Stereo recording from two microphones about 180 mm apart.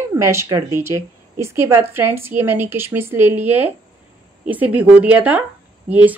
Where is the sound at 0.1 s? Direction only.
15° right (ahead or behind).